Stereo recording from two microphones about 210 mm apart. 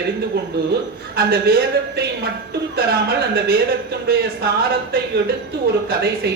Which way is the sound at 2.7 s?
50° right (ahead or behind).